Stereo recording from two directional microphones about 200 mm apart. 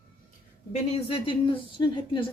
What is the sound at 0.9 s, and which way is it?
Speech, 25° left (ahead or behind).